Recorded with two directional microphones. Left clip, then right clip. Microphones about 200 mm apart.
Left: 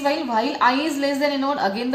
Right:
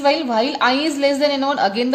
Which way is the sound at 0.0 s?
45° right (ahead or behind).